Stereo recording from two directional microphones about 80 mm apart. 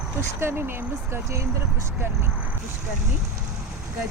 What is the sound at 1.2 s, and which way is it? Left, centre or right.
Speech, right.